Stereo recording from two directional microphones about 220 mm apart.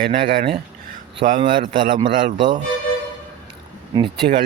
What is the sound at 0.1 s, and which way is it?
Speech, 40° right (ahead or behind).